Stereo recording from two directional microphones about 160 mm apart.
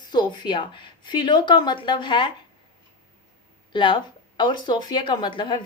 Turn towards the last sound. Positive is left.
turn(degrees=30)  # may be behind; listen again after turning